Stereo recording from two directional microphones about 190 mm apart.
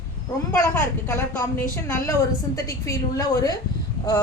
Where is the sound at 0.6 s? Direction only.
10° left (ahead or behind).